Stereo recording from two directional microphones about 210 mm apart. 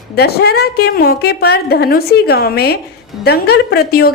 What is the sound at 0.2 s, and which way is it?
A woman's voice, 50° left (ahead or behind).